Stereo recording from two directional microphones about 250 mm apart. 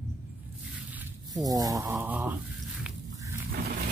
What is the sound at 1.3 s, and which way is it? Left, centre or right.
Speech, centre.